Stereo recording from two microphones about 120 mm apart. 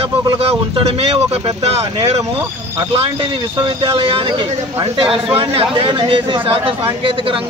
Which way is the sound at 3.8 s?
50° right (ahead or behind).